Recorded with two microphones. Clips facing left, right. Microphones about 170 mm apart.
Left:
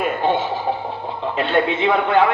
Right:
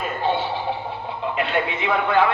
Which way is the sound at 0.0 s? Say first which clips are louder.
Left 4 dB; 50° left (ahead or behind).